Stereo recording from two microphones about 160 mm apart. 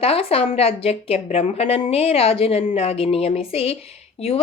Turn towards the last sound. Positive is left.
turn(degrees=40)  # may be behind; listen again after turning